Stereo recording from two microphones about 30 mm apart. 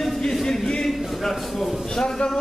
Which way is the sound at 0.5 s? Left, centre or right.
Left.